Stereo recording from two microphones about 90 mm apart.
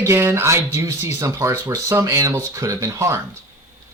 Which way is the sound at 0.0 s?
30° right (ahead or behind).